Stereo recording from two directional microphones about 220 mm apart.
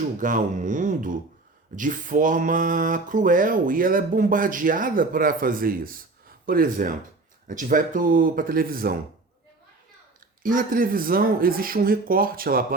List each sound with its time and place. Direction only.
0.2 s speech: 35° right (ahead or behind)
10.4 s speech: 40° right (ahead or behind)